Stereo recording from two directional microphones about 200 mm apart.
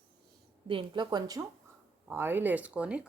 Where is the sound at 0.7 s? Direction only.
25° right (ahead or behind).